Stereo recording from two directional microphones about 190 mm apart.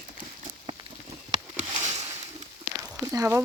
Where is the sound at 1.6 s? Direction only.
35° right (ahead or behind).